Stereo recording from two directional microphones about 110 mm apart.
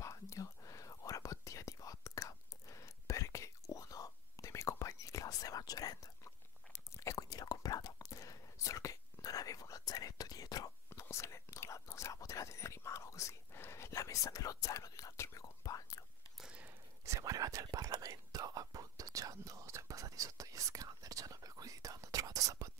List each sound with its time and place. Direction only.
0.0 s whispering: 30° left (ahead or behind)
16.3 s a sound: 10° right (ahead or behind)
17.0 s whispering: 30° right (ahead or behind)